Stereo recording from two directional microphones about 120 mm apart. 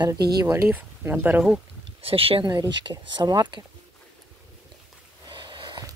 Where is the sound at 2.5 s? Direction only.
40° right (ahead or behind).